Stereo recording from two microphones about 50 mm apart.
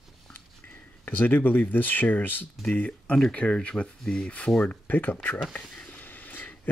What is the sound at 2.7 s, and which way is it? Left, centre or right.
Speech, left.